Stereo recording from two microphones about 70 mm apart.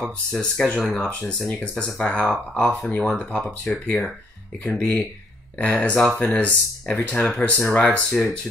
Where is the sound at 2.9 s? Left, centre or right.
Centre.